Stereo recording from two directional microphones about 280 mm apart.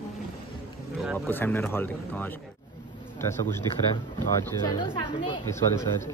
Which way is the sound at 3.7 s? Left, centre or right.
Centre.